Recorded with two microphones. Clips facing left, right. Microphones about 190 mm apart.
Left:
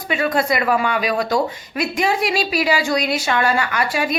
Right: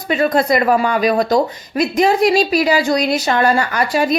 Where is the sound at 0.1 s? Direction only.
40° right (ahead or behind).